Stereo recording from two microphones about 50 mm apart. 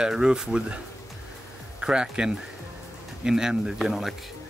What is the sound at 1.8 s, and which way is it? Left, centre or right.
Speech, centre.